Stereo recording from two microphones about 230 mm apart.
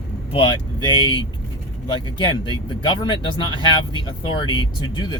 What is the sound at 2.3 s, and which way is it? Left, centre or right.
Speech, centre.